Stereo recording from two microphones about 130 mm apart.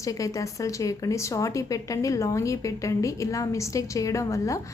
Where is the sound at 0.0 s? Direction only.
25° left (ahead or behind).